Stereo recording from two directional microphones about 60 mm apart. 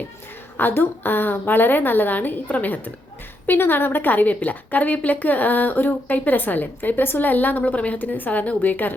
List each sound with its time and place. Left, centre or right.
0.5 s a woman's voice: left